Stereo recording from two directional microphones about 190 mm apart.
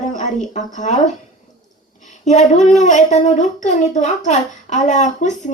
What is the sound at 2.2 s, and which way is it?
Speech, 40° left (ahead or behind).